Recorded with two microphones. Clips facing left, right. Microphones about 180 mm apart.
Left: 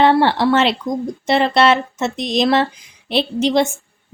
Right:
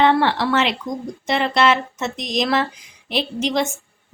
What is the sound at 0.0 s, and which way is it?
Speech, 30° left (ahead or behind).